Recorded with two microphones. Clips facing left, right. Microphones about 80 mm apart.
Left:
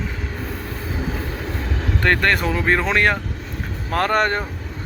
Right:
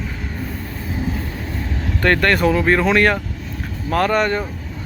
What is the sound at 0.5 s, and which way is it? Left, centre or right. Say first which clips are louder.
Train: even; left.